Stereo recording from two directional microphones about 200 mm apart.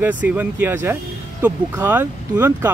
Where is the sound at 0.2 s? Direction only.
10° right (ahead or behind).